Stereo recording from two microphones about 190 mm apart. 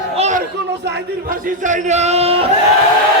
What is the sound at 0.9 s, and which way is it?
Speech, 65° right (ahead or behind).